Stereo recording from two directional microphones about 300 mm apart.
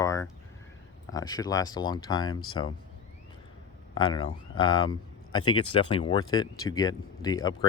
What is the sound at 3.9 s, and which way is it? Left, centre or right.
A man's voice, centre.